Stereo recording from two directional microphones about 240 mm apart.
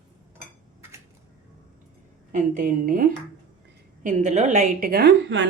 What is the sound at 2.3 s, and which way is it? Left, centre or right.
A woman's voice, right.